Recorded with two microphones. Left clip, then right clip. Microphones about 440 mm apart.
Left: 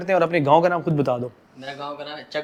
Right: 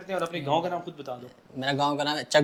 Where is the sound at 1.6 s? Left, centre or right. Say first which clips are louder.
Right 6 dB; right.